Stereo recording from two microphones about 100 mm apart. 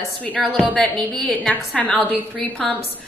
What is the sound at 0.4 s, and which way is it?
A woman's voice, centre (ahead or behind).